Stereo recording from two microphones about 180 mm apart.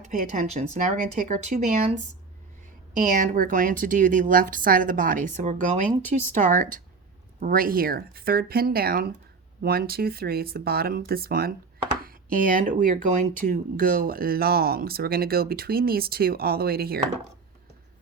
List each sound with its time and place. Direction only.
0.0 s speech: 45° right (ahead or behind)